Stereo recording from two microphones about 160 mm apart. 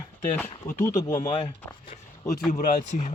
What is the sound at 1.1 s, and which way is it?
Speech, 55° left (ahead or behind).